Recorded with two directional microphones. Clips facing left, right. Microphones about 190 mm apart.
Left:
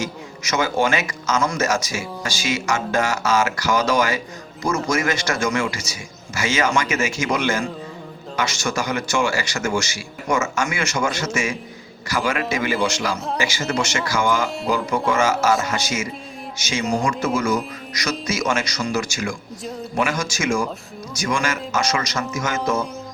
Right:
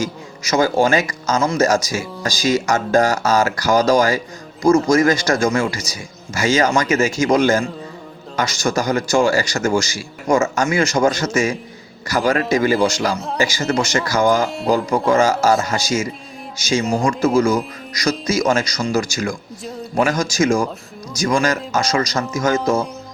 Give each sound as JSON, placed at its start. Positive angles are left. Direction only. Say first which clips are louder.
{"t": 0.0, "sound": "a man's voice", "louder": "right 4 dB", "side_deg": -35}